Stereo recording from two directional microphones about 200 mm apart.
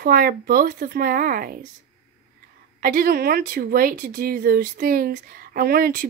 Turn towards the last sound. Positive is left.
turn(degrees=-50)  # may be behind; listen again after turning